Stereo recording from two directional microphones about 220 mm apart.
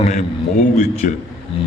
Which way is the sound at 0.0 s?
30° left (ahead or behind).